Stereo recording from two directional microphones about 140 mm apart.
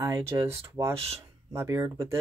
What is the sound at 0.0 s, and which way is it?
Speech, 20° right (ahead or behind).